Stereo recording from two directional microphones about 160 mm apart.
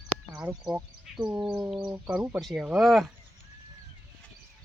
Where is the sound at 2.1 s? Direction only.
5° right (ahead or behind).